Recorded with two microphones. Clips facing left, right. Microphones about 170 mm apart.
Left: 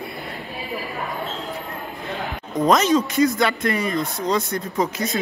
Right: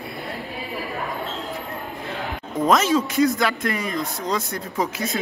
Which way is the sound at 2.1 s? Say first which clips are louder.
Left 2 dB; centre (ahead or behind).